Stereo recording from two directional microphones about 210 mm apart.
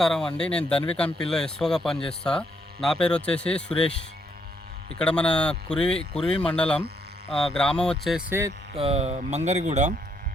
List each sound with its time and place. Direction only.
0.0 s speech: centre (ahead or behind)
4.9 s speech: 5° left (ahead or behind); by 8.5 s 10° right (ahead or behind)
8.7 s speech: 25° right (ahead or behind)